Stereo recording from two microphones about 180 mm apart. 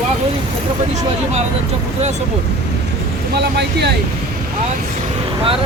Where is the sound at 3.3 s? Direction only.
65° right (ahead or behind).